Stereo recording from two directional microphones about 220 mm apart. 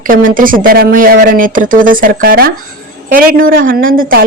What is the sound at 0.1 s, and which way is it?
Speech, 40° right (ahead or behind).